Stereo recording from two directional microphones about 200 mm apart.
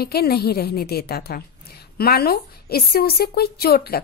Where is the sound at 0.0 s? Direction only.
50° left (ahead or behind).